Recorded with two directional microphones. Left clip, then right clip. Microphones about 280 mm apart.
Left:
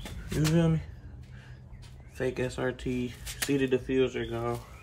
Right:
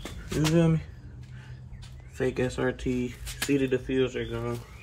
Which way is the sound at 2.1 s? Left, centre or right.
Centre.